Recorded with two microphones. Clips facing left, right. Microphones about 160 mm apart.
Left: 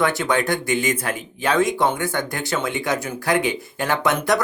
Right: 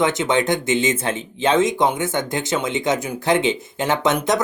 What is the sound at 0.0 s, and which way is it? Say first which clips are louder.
Speech: right 2 dB; 20° right (ahead or behind).